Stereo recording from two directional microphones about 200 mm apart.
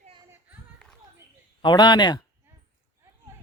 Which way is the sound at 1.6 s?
20° left (ahead or behind).